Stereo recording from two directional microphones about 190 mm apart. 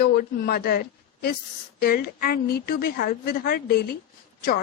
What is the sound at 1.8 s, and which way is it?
A woman's voice, 55° left (ahead or behind).